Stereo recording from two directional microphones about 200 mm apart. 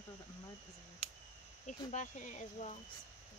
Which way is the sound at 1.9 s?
35° left (ahead or behind).